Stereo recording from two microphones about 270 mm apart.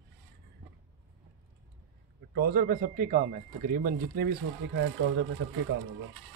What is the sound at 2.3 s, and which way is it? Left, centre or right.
Speech, right.